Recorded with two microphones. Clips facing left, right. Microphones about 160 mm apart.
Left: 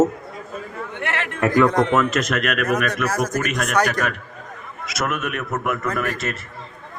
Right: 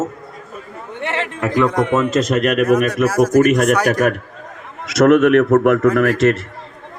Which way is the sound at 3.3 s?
30° right (ahead or behind).